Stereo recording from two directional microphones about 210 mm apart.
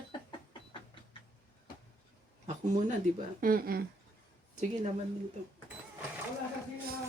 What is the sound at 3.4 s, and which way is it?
Speech, 45° right (ahead or behind).